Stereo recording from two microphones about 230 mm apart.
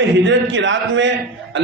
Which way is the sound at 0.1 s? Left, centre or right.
Right.